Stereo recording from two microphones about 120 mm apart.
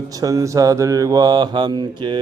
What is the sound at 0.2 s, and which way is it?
Speech, 30° right (ahead or behind).